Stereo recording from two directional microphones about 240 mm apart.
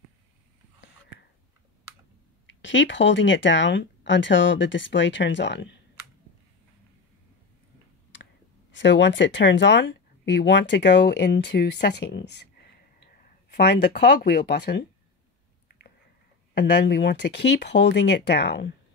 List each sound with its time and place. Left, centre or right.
2.4 s speech: left
8.7 s speech: left
16.5 s speech: left